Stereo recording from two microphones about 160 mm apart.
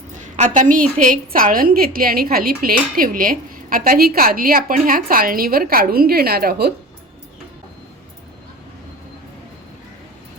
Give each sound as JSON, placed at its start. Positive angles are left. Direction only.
{"t": 0.2, "sound": "a woman's voice", "side_deg": -50}